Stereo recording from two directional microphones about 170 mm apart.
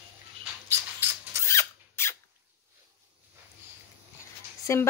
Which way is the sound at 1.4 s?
15° left (ahead or behind).